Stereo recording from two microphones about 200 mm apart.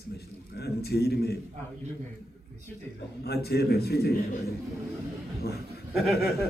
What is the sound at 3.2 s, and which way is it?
A man's voice, 55° left (ahead or behind).